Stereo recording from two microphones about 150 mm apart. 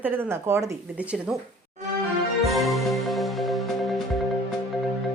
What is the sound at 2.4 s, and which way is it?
Music, centre (ahead or behind).